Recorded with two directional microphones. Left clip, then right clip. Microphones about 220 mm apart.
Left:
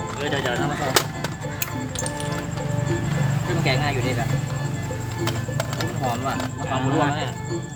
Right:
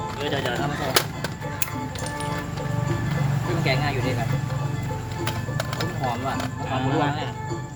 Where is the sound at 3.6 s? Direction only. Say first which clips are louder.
Left 1 dB; 15° left (ahead or behind).